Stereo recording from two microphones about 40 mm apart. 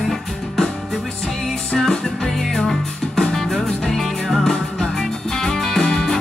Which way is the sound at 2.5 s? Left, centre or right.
Centre.